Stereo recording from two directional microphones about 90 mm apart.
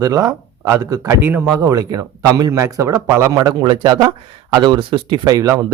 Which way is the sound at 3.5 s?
60° right (ahead or behind).